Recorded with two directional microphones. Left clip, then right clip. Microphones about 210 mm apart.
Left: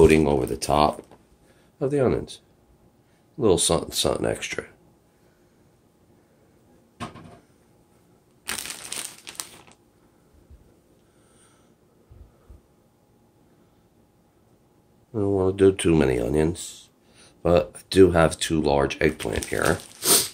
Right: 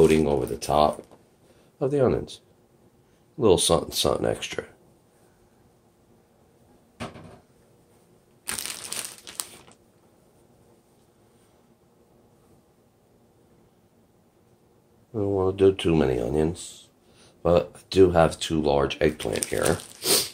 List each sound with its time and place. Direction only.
0.0 s speech: 35° left (ahead or behind)
1.8 s speech: 10° left (ahead or behind)
8.5 s crumpling: centre (ahead or behind)
15.1 s speech: 20° left (ahead or behind)
19.2 s speech: 5° left (ahead or behind)
20.0 s pig: 20° left (ahead or behind)